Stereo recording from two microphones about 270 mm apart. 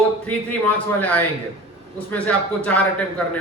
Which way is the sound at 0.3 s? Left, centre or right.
Centre.